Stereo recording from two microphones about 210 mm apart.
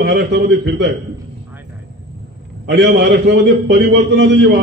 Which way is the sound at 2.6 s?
55° right (ahead or behind).